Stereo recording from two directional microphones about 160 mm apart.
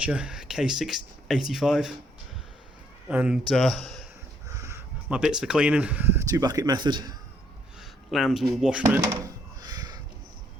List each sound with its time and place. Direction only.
0.0 s speech: 5° right (ahead or behind)
3.1 s a man's voice: 5° right (ahead or behind)
4.4 s a sound: 20° right (ahead or behind)
5.0 s speech: 5° right (ahead or behind); by 7.2 s 25° right (ahead or behind)
7.8 s speech: centre (ahead or behind)
9.6 s a sound: 25° right (ahead or behind)